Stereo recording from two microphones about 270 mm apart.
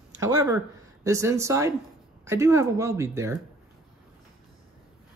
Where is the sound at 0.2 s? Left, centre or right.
Centre.